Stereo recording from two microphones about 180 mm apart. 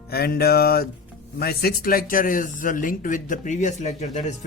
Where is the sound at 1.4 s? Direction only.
60° left (ahead or behind).